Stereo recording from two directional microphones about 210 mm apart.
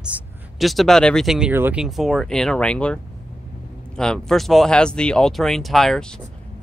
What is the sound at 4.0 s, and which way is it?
Speech, 5° left (ahead or behind).